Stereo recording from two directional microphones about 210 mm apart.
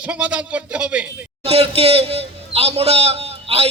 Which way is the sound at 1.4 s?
30° right (ahead or behind).